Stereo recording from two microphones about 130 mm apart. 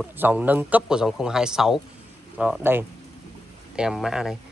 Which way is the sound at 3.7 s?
5° right (ahead or behind).